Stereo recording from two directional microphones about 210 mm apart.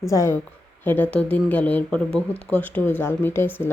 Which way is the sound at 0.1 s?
15° left (ahead or behind).